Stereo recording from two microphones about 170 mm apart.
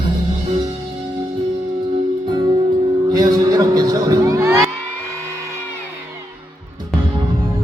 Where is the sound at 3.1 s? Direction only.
20° right (ahead or behind).